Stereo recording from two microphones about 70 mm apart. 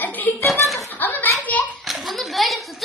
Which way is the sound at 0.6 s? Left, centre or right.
Centre.